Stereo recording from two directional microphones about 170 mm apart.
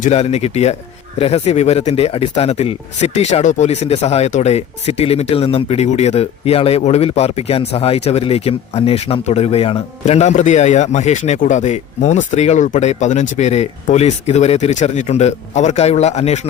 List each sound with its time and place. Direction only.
0.0 s speech: 40° left (ahead or behind)